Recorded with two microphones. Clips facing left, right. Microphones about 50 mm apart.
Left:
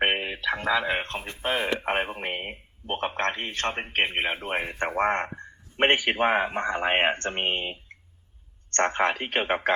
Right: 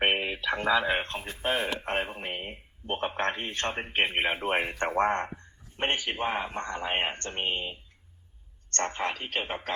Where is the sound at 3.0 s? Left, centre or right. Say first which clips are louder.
Left 2 dB; centre.